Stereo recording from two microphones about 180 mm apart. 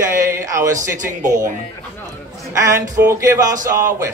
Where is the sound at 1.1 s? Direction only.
45° right (ahead or behind).